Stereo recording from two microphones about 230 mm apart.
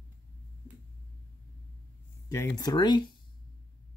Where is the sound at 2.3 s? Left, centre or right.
Centre.